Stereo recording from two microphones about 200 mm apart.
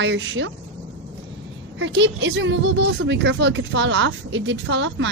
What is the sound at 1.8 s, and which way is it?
Speech, 65° right (ahead or behind).